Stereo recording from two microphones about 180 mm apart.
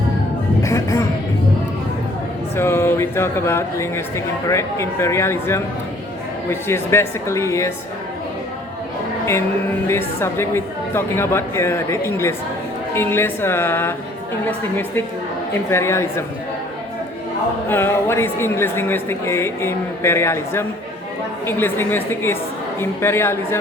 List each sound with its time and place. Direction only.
0.6 s a sound: 15° left (ahead or behind)
2.6 s a woman's voice: 15° left (ahead or behind)
10.2 s a woman's voice: 15° left (ahead or behind)
17.7 s a woman's voice: 10° left (ahead or behind)